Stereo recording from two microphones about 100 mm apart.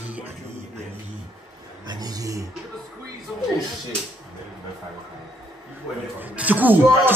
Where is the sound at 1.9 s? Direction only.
40° right (ahead or behind).